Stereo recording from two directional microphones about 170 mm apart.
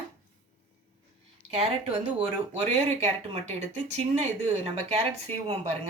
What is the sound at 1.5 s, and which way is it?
Speech, 35° right (ahead or behind).